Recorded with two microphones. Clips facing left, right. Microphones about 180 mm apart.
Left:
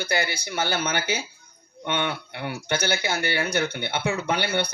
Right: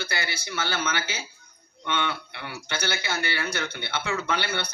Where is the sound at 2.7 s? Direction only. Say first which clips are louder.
Left 4 dB; 15° left (ahead or behind).